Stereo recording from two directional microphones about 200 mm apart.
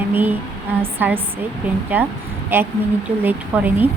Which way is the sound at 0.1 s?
10° right (ahead or behind).